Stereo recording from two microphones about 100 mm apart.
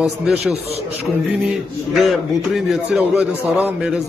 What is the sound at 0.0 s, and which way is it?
Speech, 5° right (ahead or behind).